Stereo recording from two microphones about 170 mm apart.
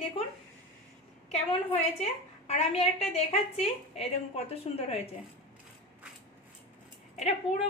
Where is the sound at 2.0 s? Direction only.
40° left (ahead or behind).